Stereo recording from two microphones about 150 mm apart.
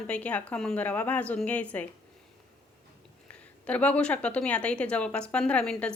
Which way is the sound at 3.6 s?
10° left (ahead or behind).